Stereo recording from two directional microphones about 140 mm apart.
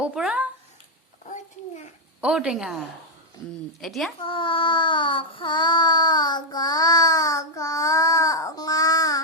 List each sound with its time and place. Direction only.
0.0 s speech: 5° right (ahead or behind)
2.2 s a woman's voice: 5° right (ahead or behind)
4.2 s child singing: 40° left (ahead or behind)